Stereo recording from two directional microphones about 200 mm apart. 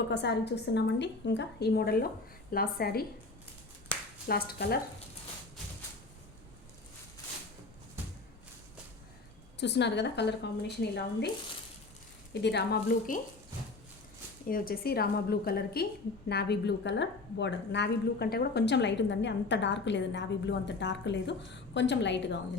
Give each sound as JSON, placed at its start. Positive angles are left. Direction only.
{"t": 0.1, "sound": "a woman's voice", "side_deg": 60}
{"t": 4.3, "sound": "a woman's voice", "side_deg": 50}
{"t": 9.6, "sound": "a woman's voice", "side_deg": 60}
{"t": 12.3, "sound": "a woman's voice", "side_deg": 60}
{"t": 14.4, "sound": "a woman's voice", "side_deg": 45}